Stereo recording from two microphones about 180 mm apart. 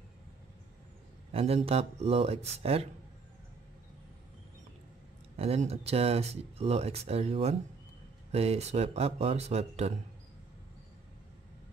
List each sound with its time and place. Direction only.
1.3 s speech: 35° right (ahead or behind)
5.4 s speech: 35° right (ahead or behind)